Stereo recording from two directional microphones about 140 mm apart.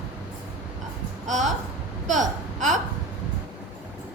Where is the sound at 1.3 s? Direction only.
60° right (ahead or behind).